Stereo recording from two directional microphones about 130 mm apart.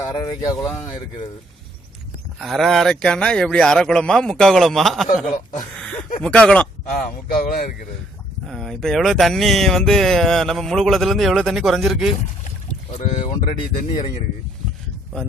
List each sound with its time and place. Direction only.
0.0 s speech: 30° left (ahead or behind)
2.4 s speech: centre (ahead or behind)
6.2 s speech: 10° left (ahead or behind)
7.0 s speech: 90° left
8.4 s speech: centre (ahead or behind)
13.0 s speech: 65° left (ahead or behind)
13.5 s speech: 50° left (ahead or behind)